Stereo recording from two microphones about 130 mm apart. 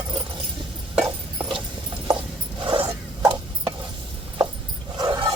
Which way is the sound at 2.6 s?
40° right (ahead or behind).